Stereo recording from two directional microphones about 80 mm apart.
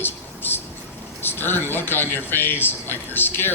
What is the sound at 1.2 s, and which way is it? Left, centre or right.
A man's voice, left.